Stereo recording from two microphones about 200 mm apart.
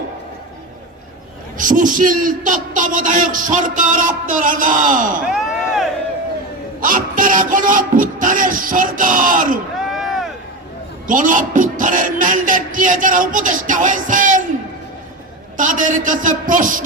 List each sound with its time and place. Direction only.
1.5 s a man's voice: 40° right (ahead or behind)
5.2 s a sound: centre (ahead or behind)
6.8 s speech: 40° right (ahead or behind)
9.9 s a sound: centre (ahead or behind)
11.0 s a man's voice: 40° right (ahead or behind)
15.5 s a man's voice: 40° right (ahead or behind)